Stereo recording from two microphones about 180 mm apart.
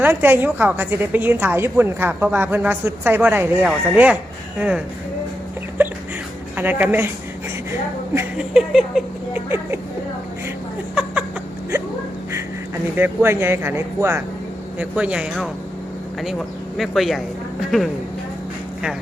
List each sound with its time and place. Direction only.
0.0 s a woman's voice: 10° right (ahead or behind)
5.8 s a sound: 10° right (ahead or behind)
6.6 s a woman's voice: 10° right (ahead or behind)
8.4 s speech: 5° right (ahead or behind)
9.5 s a woman's voice: 15° right (ahead or behind)
11.7 s a sound: 15° right (ahead or behind)
13.0 s a woman's voice: 15° right (ahead or behind)
16.7 s speech: centre (ahead or behind)